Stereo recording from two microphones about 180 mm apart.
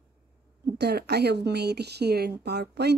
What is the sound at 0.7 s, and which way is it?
Speech, 65° right (ahead or behind).